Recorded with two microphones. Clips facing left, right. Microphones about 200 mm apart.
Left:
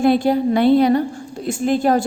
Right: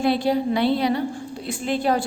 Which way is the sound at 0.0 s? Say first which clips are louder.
Left 5 dB; 50° left (ahead or behind).